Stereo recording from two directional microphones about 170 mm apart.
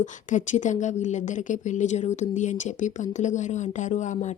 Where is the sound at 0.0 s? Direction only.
45° left (ahead or behind).